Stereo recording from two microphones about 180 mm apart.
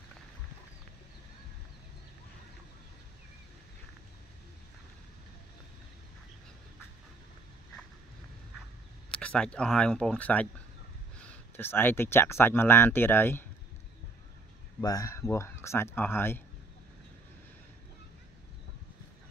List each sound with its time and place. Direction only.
9.1 s speech: 5° left (ahead or behind)
14.8 s speech: 20° left (ahead or behind)